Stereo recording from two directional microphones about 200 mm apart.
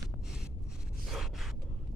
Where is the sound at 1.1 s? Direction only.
Centre (ahead or behind).